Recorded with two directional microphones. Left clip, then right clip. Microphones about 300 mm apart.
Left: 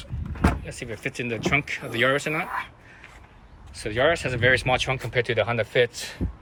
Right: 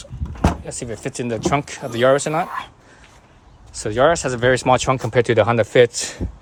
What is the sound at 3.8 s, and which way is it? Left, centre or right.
Speech, centre.